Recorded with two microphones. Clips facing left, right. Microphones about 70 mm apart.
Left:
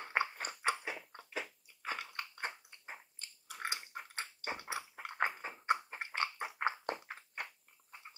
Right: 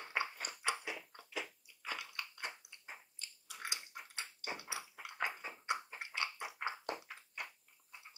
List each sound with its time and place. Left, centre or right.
0.0 s chewing: left